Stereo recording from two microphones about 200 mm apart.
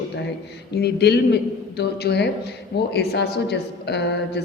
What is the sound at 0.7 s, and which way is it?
A woman's voice, 55° left (ahead or behind).